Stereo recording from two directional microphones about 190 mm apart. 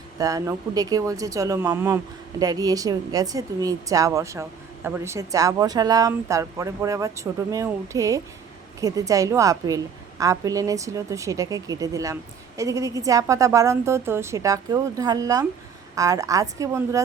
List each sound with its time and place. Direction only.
0.2 s speech: 20° right (ahead or behind)